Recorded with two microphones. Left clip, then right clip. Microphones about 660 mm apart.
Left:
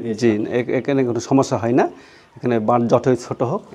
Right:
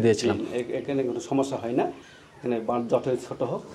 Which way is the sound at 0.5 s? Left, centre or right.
Left.